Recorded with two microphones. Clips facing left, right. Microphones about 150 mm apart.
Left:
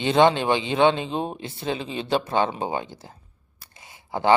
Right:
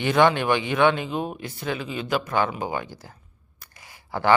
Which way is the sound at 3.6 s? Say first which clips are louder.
Left 1 dB; 25° left (ahead or behind).